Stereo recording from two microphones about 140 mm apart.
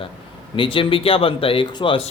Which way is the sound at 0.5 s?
40° left (ahead or behind).